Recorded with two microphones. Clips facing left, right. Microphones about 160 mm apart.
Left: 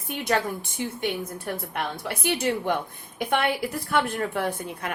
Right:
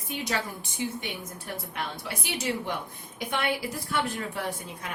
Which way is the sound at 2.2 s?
60° left (ahead or behind).